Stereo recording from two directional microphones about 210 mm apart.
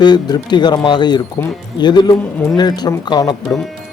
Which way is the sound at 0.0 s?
20° left (ahead or behind).